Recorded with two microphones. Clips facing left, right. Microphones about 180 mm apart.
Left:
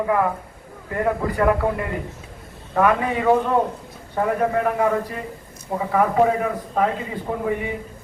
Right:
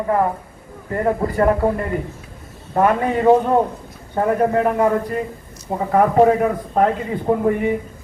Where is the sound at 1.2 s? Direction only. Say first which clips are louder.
Right 3 dB; 40° right (ahead or behind).